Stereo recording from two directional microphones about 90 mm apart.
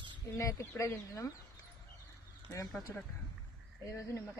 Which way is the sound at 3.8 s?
35° left (ahead or behind).